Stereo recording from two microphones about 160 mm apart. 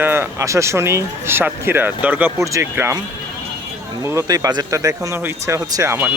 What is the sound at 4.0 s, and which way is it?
Speech, 20° right (ahead or behind).